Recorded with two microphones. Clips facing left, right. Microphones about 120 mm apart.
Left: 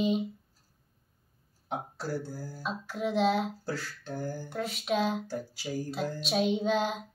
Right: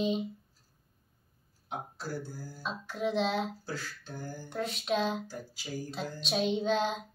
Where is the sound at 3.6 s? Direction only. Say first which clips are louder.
Left 4 dB; 75° left (ahead or behind).